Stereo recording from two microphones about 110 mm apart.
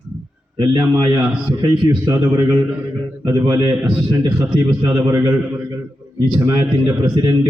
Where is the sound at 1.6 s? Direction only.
35° right (ahead or behind).